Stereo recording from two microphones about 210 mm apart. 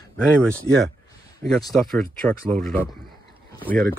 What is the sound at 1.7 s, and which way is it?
Speech, 5° left (ahead or behind).